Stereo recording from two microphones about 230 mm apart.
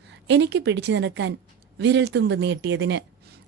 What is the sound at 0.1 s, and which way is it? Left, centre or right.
A woman's voice, right.